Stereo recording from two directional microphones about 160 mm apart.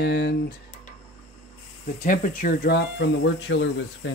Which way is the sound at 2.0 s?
60° left (ahead or behind).